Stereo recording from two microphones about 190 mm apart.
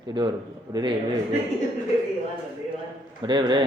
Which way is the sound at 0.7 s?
20° right (ahead or behind).